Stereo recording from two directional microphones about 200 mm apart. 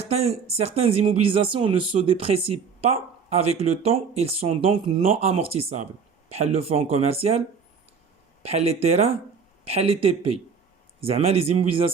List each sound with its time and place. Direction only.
0.0 s speech: 30° right (ahead or behind)
8.4 s speech: 30° right (ahead or behind)